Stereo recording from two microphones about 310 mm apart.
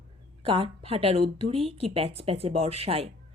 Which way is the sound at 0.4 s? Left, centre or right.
Centre.